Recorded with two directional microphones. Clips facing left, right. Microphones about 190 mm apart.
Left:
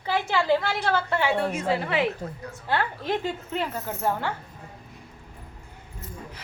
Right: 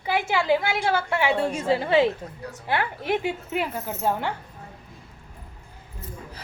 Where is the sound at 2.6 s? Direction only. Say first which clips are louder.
Right 1 dB; 15° right (ahead or behind).